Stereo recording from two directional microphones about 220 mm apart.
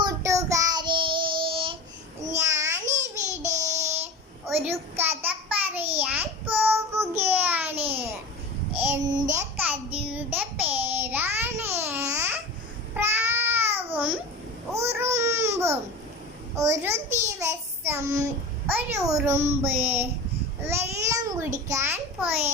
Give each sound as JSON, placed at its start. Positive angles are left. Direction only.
{"t": 0.0, "sound": "child singing", "side_deg": -15}
{"t": 2.3, "sound": "babbling", "side_deg": -15}
{"t": 4.4, "sound": "child singing", "side_deg": -10}
{"t": 9.1, "sound": "babbling", "side_deg": -10}
{"t": 10.1, "sound": "a sound", "side_deg": -10}
{"t": 10.8, "sound": "babbling", "side_deg": -10}
{"t": 16.6, "sound": "child singing", "side_deg": -15}
{"t": 20.7, "sound": "babbling", "side_deg": -15}
{"t": 21.7, "sound": "a sound", "side_deg": -10}